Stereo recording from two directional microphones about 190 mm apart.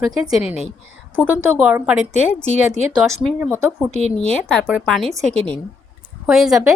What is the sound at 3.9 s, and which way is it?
Speech, 35° left (ahead or behind).